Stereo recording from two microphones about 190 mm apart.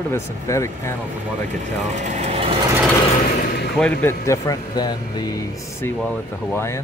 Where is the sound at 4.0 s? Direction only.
15° left (ahead or behind).